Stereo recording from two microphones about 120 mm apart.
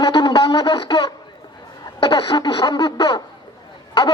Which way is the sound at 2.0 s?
50° left (ahead or behind).